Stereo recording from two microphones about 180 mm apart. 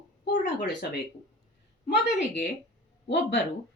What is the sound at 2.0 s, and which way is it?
Speech, 80° left.